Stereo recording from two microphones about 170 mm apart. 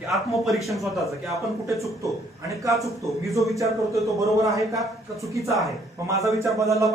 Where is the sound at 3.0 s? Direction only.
20° right (ahead or behind).